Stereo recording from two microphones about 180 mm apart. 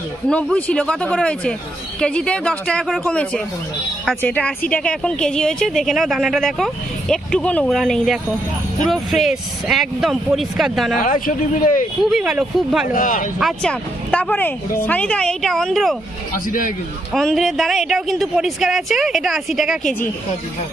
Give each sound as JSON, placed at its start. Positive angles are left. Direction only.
{"t": 0.3, "sound": "speech", "side_deg": 5}
{"t": 11.0, "sound": "speech", "side_deg": 50}
{"t": 12.0, "sound": "speech", "side_deg": 0}
{"t": 12.8, "sound": "speech", "side_deg": 50}
{"t": 13.4, "sound": "speech", "side_deg": 0}
{"t": 16.4, "sound": "speech", "side_deg": 50}
{"t": 17.1, "sound": "speech", "side_deg": 0}